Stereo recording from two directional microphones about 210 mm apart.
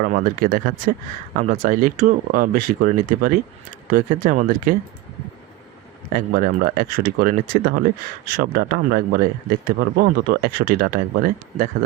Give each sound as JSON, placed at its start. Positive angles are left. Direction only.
{"t": 0.0, "sound": "speech", "side_deg": -40}
{"t": 6.1, "sound": "speech", "side_deg": -45}